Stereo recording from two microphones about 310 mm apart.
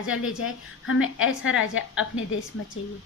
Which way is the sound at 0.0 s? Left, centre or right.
Left.